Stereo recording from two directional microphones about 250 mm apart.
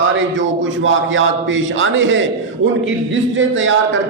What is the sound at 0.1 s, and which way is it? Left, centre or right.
A man's voice, right.